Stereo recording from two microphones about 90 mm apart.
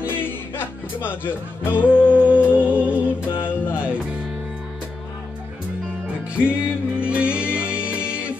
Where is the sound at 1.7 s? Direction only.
15° right (ahead or behind).